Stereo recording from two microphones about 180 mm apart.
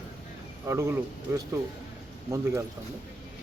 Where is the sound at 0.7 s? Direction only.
15° right (ahead or behind).